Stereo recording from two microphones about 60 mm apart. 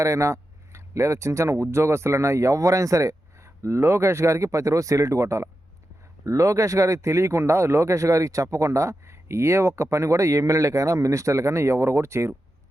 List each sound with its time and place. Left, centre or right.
0.0 s a man's voice: right